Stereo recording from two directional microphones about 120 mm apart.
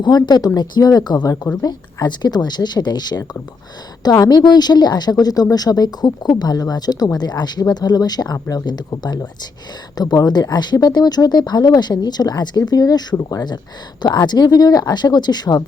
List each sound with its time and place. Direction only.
0.0 s a woman's voice: 35° left (ahead or behind)